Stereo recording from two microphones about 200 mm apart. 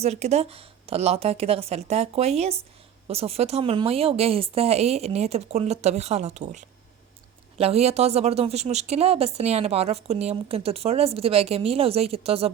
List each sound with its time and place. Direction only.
0.0 s speech: 35° right (ahead or behind)